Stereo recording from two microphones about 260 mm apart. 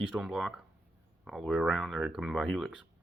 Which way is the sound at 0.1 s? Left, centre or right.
Centre.